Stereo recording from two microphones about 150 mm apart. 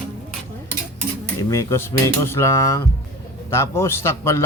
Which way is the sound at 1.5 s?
20° left (ahead or behind).